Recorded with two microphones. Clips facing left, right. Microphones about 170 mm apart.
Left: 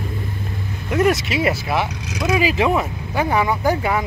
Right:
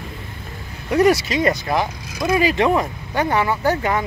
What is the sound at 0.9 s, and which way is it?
Speech, 5° left (ahead or behind).